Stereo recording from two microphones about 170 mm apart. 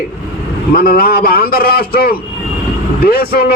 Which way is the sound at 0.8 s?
60° left (ahead or behind).